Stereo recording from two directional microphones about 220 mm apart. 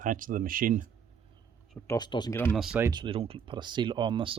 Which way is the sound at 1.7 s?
15° left (ahead or behind).